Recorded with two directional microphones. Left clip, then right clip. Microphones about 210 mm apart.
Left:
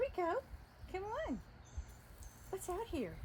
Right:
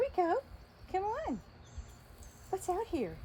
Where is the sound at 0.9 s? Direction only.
30° right (ahead or behind).